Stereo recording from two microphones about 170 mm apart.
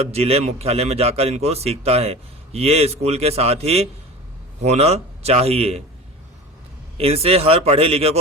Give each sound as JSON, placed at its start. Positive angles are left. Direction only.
{"t": 0.1, "sound": "a man's voice", "side_deg": -40}
{"t": 6.9, "sound": "a man's voice", "side_deg": -35}